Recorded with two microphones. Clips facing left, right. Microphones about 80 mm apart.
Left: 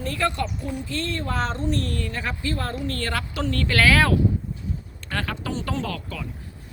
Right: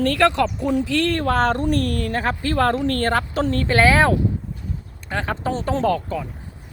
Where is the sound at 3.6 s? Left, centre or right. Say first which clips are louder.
Right 3 dB; right.